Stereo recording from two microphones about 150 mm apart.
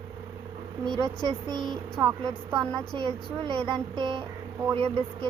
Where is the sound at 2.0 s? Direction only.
30° right (ahead or behind).